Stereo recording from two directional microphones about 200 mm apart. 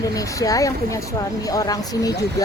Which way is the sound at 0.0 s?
15° left (ahead or behind).